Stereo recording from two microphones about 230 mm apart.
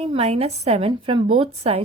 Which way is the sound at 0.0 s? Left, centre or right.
Right.